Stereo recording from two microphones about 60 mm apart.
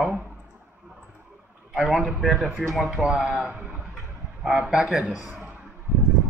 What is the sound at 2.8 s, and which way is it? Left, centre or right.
A man's voice, centre.